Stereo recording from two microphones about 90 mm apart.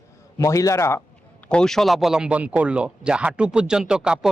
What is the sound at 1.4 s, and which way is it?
Speech, 10° left (ahead or behind).